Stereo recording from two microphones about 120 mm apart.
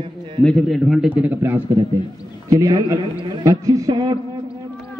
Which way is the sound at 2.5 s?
30° right (ahead or behind).